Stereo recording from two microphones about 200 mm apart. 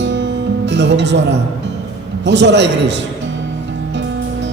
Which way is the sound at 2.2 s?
60° right (ahead or behind).